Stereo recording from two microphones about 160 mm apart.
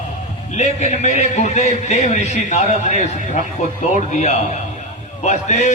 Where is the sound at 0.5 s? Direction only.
45° left (ahead or behind).